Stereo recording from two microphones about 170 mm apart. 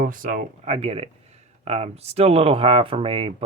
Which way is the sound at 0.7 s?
35° right (ahead or behind).